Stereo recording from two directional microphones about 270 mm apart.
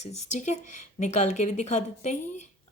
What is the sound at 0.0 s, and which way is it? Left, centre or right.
Speech, left.